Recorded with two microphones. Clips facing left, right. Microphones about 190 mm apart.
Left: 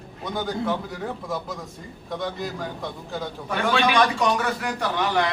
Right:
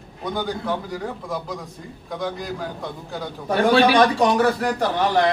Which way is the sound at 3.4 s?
35° right (ahead or behind).